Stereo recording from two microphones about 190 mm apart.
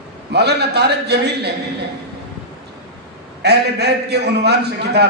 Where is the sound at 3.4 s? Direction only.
60° right (ahead or behind).